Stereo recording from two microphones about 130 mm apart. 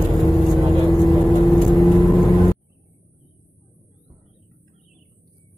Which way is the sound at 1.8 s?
35° left (ahead or behind).